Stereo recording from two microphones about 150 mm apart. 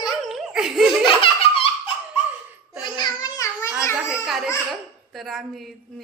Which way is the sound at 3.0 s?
25° left (ahead or behind).